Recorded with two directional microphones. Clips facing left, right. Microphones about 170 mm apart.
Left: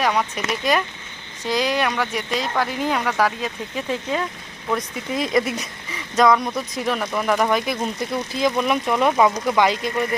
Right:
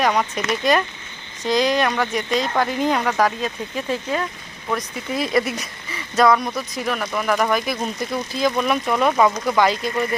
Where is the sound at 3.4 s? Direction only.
15° left (ahead or behind).